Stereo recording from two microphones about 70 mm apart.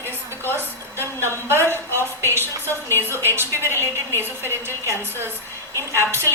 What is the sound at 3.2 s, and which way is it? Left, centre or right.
A woman's voice, right.